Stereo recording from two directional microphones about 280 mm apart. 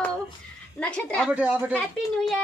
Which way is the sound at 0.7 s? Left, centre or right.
Centre.